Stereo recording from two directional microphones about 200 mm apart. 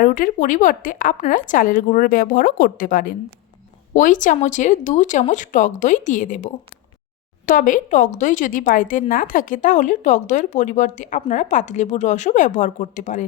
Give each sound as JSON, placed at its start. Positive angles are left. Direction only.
{"t": 0.0, "sound": "a woman's voice", "side_deg": 40}